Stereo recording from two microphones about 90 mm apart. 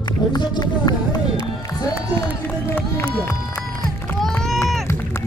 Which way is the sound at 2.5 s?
20° left (ahead or behind).